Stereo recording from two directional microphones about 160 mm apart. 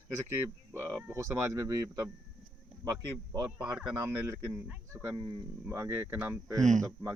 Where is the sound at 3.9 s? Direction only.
20° right (ahead or behind).